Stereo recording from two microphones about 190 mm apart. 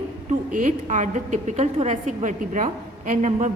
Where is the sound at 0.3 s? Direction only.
40° right (ahead or behind).